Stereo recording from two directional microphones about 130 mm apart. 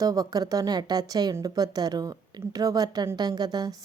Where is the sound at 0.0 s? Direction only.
30° right (ahead or behind).